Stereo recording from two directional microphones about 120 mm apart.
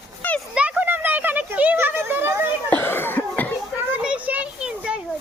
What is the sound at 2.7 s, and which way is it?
Cough, 20° left (ahead or behind).